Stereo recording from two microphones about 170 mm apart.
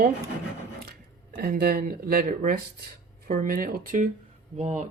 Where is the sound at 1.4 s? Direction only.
60° right (ahead or behind).